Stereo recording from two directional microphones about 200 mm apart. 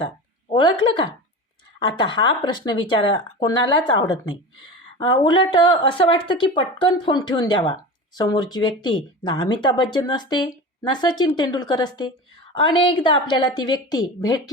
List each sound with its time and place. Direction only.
0.5 s speech: 25° left (ahead or behind)